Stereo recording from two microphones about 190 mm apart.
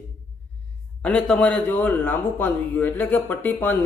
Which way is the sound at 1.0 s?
5° left (ahead or behind).